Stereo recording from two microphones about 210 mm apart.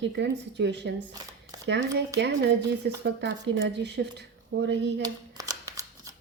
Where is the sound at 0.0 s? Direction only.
55° right (ahead or behind).